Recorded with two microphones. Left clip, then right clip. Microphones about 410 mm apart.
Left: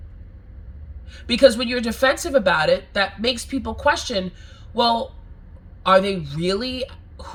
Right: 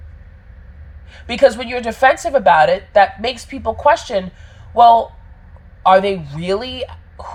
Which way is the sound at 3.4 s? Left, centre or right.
Centre.